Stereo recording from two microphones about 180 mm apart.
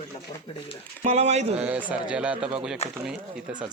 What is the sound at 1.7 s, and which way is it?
A man's voice, 10° right (ahead or behind).